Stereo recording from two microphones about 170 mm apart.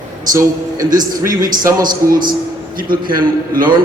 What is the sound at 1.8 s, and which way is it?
A man's voice, 55° right (ahead or behind).